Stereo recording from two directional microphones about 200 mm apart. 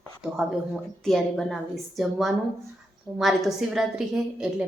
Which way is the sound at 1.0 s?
Centre (ahead or behind).